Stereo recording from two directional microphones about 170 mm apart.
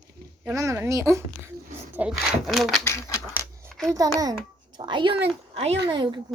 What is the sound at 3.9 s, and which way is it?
A child's voice, 20° right (ahead or behind).